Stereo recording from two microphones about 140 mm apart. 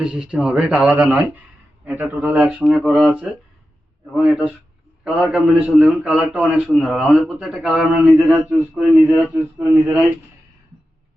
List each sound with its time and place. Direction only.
0.0 s a man's voice: 5° right (ahead or behind)
9.3 s speech: 15° right (ahead or behind)